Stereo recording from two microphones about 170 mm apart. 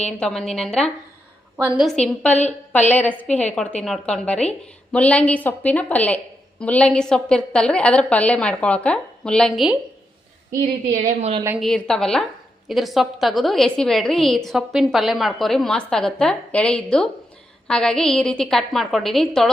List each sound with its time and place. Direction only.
0.0 s a woman's voice: 5° left (ahead or behind)
1.5 s a woman's voice: 10° right (ahead or behind)
10.9 s a woman's voice: 40° right (ahead or behind)
11.6 s a woman's voice: 5° left (ahead or behind)